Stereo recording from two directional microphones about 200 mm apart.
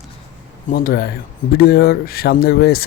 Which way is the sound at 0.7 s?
50° left (ahead or behind).